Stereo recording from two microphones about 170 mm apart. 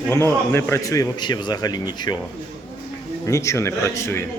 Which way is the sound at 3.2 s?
15° left (ahead or behind).